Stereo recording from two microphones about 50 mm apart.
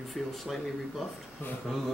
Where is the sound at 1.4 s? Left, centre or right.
Left.